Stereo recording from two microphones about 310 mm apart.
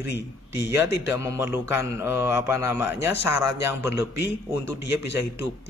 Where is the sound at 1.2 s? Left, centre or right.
Centre.